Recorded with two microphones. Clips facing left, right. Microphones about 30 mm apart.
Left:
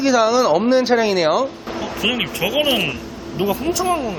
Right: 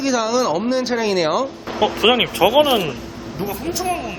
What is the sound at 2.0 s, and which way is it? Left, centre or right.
Speech, right.